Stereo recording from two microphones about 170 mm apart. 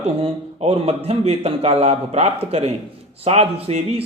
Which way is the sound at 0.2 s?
35° right (ahead or behind).